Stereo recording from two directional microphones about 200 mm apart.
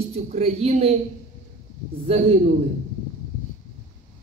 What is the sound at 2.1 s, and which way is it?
Speech, 30° right (ahead or behind).